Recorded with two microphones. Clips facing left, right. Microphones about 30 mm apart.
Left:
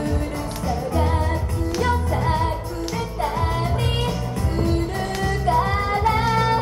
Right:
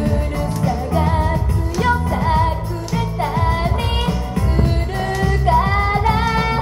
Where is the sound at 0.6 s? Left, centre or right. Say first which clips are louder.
Right 3 dB; centre.